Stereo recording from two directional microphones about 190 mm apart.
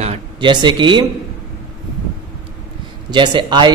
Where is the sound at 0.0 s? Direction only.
30° right (ahead or behind).